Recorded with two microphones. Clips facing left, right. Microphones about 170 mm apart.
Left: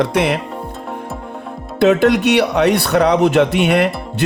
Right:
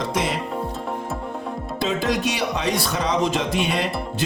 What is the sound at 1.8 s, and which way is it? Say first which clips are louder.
Speech: left 11 dB; 65° left (ahead or behind).